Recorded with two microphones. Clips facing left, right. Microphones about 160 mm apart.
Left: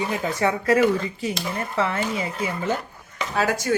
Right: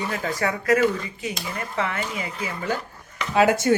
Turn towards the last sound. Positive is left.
turn(degrees=-25)  # may be behind; listen again after turning